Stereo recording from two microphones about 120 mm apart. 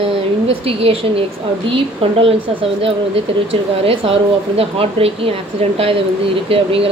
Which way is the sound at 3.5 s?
50° right (ahead or behind).